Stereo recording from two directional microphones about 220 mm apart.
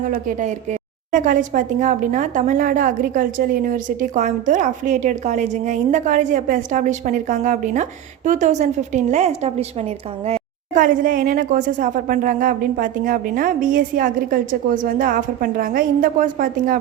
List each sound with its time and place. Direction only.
0.1 s a woman's voice: 35° right (ahead or behind)